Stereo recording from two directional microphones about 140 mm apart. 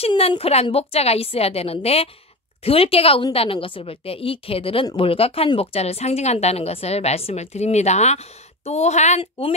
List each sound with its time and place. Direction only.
0.1 s a woman's voice: 40° left (ahead or behind); by 9.2 s 55° left (ahead or behind)